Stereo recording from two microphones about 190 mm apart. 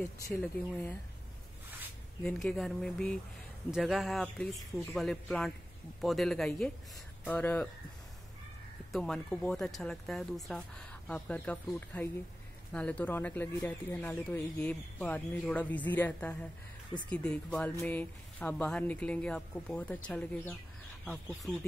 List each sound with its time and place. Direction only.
0.3 s speech: 10° left (ahead or behind)
2.2 s a man's voice: centre (ahead or behind)
8.9 s a man's voice: 5° left (ahead or behind)